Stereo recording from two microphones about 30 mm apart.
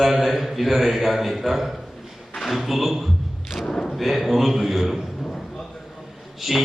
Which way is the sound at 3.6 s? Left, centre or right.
Centre.